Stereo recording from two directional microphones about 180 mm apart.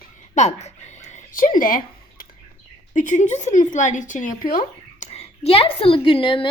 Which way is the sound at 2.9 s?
45° left (ahead or behind).